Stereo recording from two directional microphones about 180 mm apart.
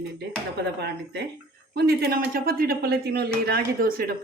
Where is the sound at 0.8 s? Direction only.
70° right (ahead or behind).